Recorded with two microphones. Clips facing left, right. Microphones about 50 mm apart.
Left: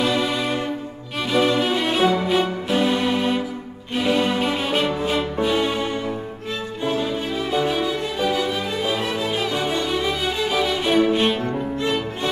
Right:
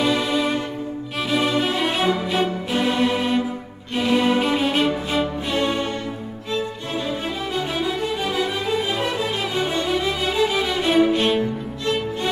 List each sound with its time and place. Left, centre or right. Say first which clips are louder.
0.0 s music: right 1 dB; centre
6.5 s music: left 1 dB; centre
7.6 s music: left 1 dB; centre